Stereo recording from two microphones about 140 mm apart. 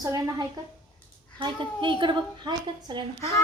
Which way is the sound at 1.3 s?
35° right (ahead or behind).